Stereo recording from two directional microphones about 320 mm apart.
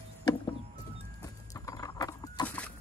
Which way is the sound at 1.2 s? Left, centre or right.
Centre.